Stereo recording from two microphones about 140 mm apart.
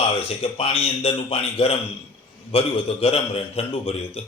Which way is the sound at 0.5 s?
45° left (ahead or behind).